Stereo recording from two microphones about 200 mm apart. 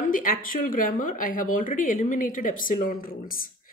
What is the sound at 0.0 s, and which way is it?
Speech, 45° left (ahead or behind).